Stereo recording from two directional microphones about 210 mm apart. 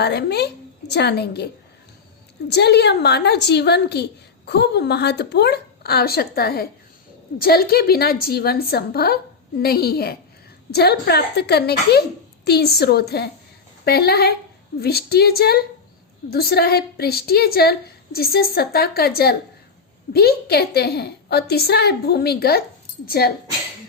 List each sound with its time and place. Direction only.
0.0 s a woman's voice: 50° left (ahead or behind)
2.5 s a woman's voice: 50° left (ahead or behind)